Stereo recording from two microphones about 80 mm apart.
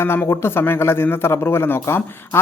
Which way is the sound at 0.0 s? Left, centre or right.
Left.